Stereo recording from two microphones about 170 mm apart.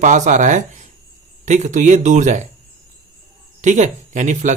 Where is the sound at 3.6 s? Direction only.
45° right (ahead or behind).